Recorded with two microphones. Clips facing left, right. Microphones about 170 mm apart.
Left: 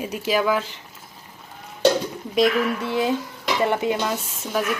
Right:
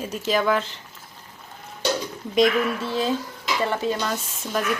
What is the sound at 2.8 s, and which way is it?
Speech, 15° left (ahead or behind).